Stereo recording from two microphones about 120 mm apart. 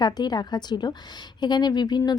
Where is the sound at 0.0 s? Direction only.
35° left (ahead or behind).